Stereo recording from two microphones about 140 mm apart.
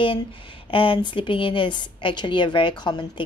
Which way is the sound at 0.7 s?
35° left (ahead or behind).